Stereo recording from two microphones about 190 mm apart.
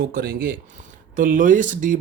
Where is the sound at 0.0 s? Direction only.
50° right (ahead or behind).